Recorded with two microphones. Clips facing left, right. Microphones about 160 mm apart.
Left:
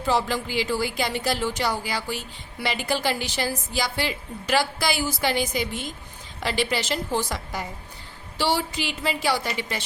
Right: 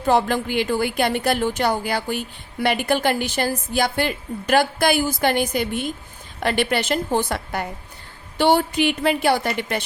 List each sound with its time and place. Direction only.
0.0 s a woman's voice: 55° right (ahead or behind)